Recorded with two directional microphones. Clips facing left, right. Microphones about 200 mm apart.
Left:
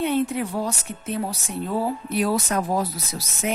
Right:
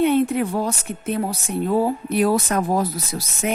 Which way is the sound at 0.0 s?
60° right (ahead or behind).